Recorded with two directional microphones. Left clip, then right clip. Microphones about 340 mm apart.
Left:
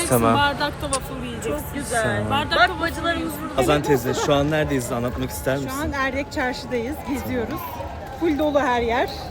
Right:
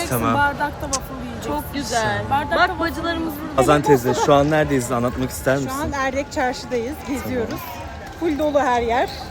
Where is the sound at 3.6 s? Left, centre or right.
Centre.